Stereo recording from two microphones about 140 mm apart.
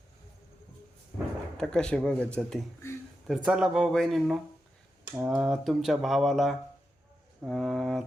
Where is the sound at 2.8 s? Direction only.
20° left (ahead or behind).